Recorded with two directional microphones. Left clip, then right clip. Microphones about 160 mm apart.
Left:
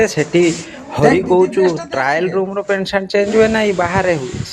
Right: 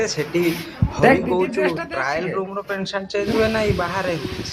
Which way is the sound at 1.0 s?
20° left (ahead or behind).